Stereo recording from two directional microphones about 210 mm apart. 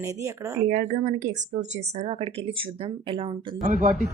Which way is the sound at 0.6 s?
35° right (ahead or behind).